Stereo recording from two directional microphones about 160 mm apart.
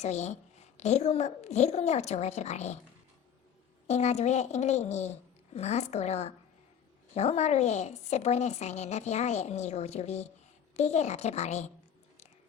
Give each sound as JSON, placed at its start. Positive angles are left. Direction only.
{"t": 0.0, "sound": "a woman's voice", "side_deg": 45}
{"t": 3.8, "sound": "a woman's voice", "side_deg": 45}